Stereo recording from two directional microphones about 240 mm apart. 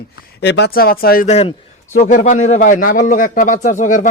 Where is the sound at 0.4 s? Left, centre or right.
Left.